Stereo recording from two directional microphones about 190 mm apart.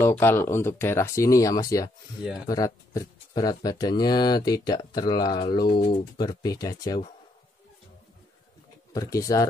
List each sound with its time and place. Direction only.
0.2 s speech: 10° left (ahead or behind)
8.9 s speech: 15° left (ahead or behind)